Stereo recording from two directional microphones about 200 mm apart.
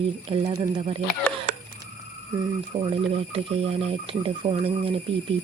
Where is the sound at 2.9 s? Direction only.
30° right (ahead or behind).